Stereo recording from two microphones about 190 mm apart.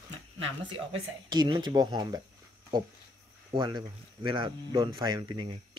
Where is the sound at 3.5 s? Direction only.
20° right (ahead or behind).